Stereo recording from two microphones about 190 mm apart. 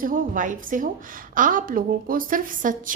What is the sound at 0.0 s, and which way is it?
A woman's voice, 45° right (ahead or behind).